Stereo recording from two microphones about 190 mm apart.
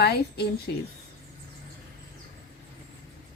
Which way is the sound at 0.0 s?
60° left (ahead or behind).